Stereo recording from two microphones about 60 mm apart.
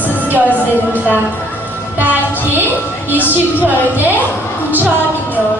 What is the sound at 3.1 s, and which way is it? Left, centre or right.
A woman's voice, right.